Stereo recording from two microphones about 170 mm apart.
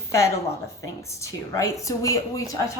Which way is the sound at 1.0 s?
15° left (ahead or behind).